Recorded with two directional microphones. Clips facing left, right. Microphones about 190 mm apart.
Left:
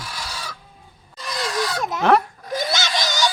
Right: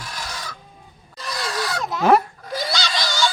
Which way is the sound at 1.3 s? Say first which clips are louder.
Left 2 dB; 15° left (ahead or behind).